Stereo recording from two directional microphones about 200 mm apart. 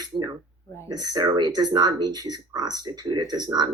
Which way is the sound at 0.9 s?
20° right (ahead or behind).